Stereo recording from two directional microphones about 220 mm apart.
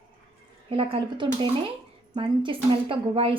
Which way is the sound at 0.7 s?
20° right (ahead or behind).